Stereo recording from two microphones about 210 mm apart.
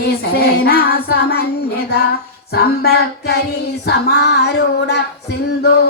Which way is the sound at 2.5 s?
50° left (ahead or behind).